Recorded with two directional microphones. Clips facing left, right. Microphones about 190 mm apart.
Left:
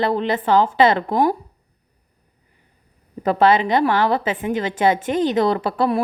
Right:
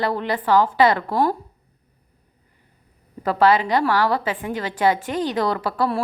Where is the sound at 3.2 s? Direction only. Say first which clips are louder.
Left 2 dB; 20° left (ahead or behind).